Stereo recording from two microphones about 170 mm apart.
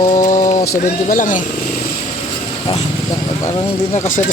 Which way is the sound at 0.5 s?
20° left (ahead or behind).